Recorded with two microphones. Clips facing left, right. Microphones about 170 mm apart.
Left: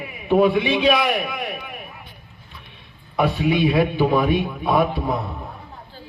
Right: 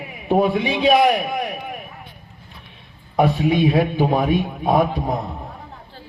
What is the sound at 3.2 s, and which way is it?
A man's voice, 45° right (ahead or behind).